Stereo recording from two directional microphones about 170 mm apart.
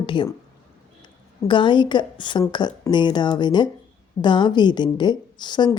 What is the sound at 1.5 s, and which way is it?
Speech, 30° left (ahead or behind).